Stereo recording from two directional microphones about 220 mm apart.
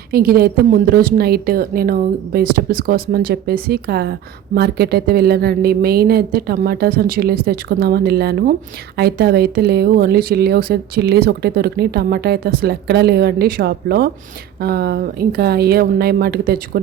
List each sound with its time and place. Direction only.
0.1 s speech: 45° right (ahead or behind)